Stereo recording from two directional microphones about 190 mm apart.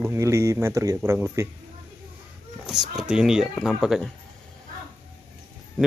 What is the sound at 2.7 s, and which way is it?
Speech, centre (ahead or behind).